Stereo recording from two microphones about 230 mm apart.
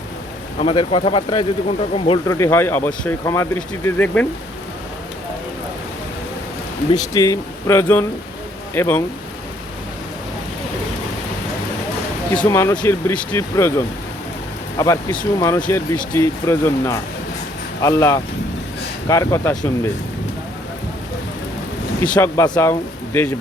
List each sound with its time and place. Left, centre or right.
0.6 s speech: left; by 4.3 s centre
6.9 s speech: centre
12.4 s speech: centre
22.1 s speech: centre